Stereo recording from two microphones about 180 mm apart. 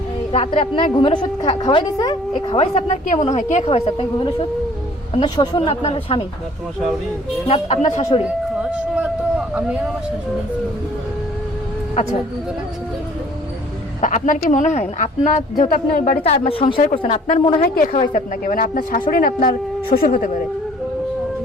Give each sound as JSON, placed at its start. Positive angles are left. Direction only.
{"t": 0.3, "sound": "a woman's voice", "side_deg": 35}
{"t": 7.4, "sound": "a woman's voice", "side_deg": 35}
{"t": 8.3, "sound": "a sound", "side_deg": -5}
{"t": 9.6, "sound": "speech", "side_deg": -5}
{"t": 14.0, "sound": "a woman's voice", "side_deg": 45}
{"t": 16.2, "sound": "a woman's voice", "side_deg": 35}
{"t": 17.7, "sound": "a woman's voice", "side_deg": 50}